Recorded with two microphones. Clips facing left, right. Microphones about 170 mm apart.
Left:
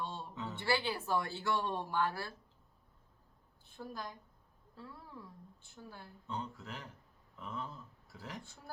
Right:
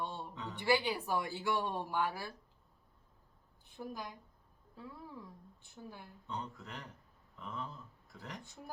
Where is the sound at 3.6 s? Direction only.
15° right (ahead or behind).